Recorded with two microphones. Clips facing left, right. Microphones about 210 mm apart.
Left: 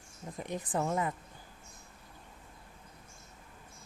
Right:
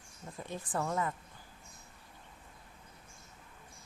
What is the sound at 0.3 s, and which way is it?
Speech, 15° left (ahead or behind).